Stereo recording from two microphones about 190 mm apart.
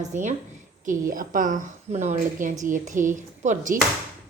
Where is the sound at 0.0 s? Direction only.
40° right (ahead or behind).